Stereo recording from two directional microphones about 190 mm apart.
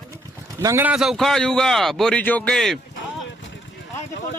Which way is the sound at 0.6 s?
15° right (ahead or behind).